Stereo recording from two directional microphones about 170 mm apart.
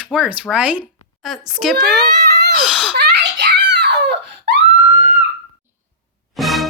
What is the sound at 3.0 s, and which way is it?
Giggle, 75° right (ahead or behind).